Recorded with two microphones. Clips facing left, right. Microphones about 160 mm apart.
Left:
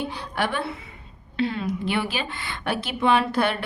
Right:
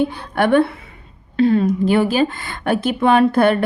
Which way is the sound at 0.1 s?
55° right (ahead or behind).